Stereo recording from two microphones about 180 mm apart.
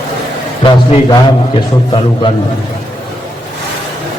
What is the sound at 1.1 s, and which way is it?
A man's voice, 25° left (ahead or behind).